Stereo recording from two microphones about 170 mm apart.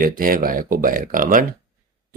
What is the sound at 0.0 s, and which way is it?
Speech, 55° right (ahead or behind).